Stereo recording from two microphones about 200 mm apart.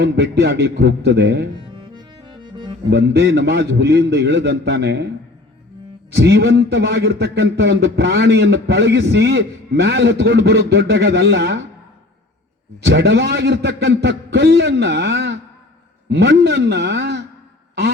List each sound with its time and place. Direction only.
0.0 s a man's voice: 55° right (ahead or behind)
2.0 s accordion: 20° right (ahead or behind)
2.9 s a man's voice: 60° right (ahead or behind)
6.1 s a man's voice: 55° right (ahead or behind)
12.8 s a man's voice: 55° right (ahead or behind)